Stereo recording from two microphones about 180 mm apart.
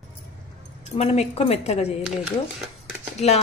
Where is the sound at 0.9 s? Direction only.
40° left (ahead or behind).